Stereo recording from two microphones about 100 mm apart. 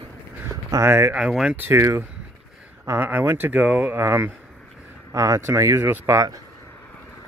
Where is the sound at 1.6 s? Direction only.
25° right (ahead or behind).